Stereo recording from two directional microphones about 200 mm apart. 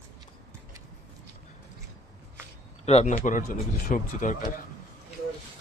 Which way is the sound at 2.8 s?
35° left (ahead or behind).